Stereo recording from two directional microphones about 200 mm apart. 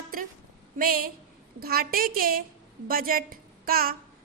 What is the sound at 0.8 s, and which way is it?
A woman's voice, 45° right (ahead or behind).